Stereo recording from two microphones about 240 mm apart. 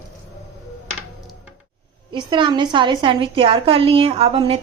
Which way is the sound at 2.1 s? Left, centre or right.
Centre.